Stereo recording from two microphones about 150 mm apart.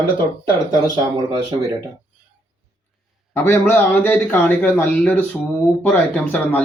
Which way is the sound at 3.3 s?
15° left (ahead or behind).